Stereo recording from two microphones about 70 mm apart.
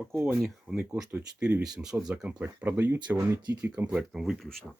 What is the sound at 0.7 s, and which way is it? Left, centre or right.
Speech, centre.